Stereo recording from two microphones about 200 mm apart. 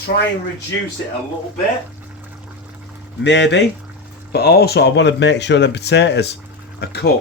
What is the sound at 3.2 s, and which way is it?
Speech, 65° left (ahead or behind).